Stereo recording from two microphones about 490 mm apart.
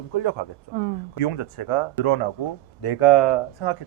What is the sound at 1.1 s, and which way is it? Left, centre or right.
Speech, left.